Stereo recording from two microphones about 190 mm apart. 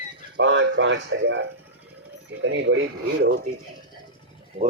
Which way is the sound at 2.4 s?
85° right.